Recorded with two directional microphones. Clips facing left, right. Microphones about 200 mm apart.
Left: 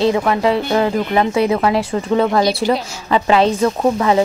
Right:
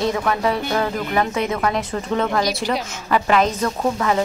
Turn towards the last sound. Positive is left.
turn(degrees=25)  # may be behind; listen again after turning